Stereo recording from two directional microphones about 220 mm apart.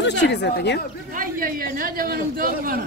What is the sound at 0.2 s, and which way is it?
Speech, 50° left (ahead or behind).